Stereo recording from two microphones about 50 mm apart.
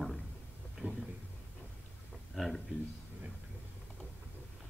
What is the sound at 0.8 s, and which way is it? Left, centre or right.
Speech, right.